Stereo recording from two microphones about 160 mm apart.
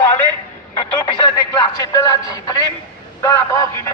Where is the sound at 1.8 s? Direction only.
25° left (ahead or behind).